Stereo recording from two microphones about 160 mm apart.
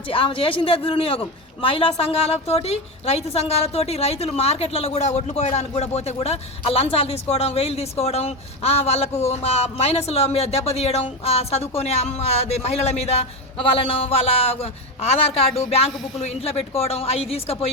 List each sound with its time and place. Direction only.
0.1 s a man's voice: 35° left (ahead or behind)